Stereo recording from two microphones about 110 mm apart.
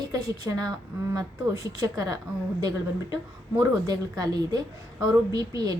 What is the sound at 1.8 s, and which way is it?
A woman's voice, 35° right (ahead or behind).